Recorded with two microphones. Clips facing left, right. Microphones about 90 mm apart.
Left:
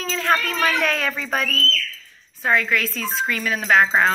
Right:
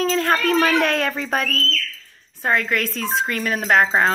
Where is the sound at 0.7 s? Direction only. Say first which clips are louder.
Right 3 dB; 50° right (ahead or behind).